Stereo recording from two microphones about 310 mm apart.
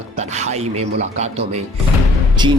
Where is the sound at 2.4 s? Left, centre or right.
Centre.